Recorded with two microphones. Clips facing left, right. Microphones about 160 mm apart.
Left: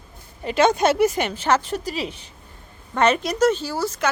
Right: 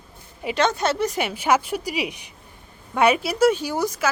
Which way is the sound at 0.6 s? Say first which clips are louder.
Left 5 dB; 10° left (ahead or behind).